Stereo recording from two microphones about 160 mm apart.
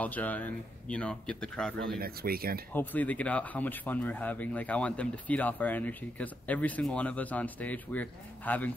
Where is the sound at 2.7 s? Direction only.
10° left (ahead or behind).